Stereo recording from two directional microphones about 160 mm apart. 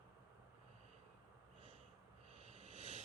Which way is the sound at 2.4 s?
40° right (ahead or behind).